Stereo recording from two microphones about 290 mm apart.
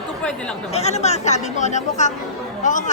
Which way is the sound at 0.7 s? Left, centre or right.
Left.